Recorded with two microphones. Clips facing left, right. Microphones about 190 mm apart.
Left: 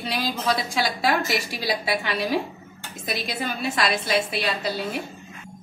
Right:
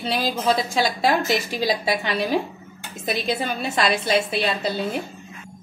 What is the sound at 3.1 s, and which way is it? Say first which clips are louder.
A woman's voice: right 4 dB; 25° right (ahead or behind).